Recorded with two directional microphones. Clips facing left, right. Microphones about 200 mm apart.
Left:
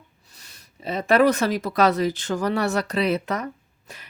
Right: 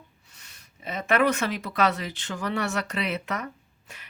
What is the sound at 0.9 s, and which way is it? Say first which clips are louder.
Speech: left 5 dB; 35° left (ahead or behind).